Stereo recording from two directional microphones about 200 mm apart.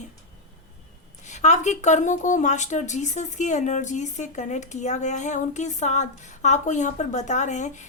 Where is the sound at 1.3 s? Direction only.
35° left (ahead or behind).